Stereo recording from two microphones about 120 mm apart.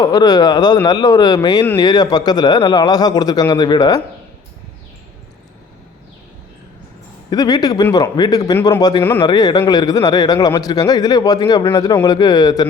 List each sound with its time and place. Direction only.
0.0 s speech: 30° left (ahead or behind)
7.3 s speech: 30° left (ahead or behind)